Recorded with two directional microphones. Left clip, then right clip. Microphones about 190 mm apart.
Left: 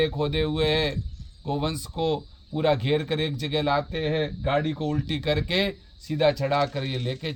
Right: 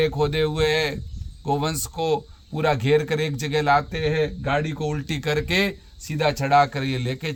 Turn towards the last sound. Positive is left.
turn(degrees=-20)  # may be behind; listen again after turning